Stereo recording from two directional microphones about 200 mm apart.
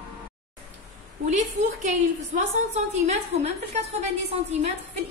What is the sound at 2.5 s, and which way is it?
A woman's voice, 35° right (ahead or behind).